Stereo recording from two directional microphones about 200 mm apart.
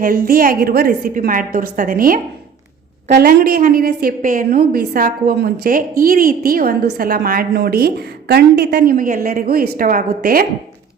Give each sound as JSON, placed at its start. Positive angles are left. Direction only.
{"t": 0.0, "sound": "a woman's voice", "side_deg": -45}